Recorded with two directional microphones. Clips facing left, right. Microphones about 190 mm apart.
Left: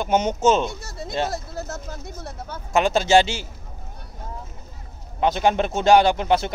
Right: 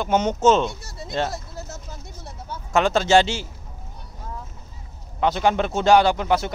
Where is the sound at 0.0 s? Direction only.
15° left (ahead or behind).